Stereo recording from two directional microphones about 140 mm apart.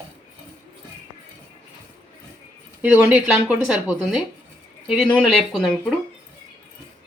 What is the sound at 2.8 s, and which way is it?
Speech, 10° right (ahead or behind).